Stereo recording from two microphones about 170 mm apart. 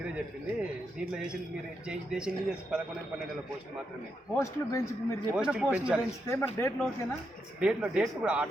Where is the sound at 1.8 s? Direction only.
5° right (ahead or behind).